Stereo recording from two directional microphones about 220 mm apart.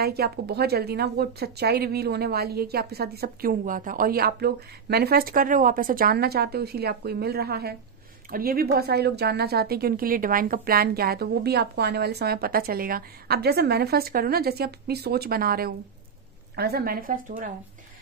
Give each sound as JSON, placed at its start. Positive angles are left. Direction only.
{"t": 0.0, "sound": "a woman's voice", "side_deg": -45}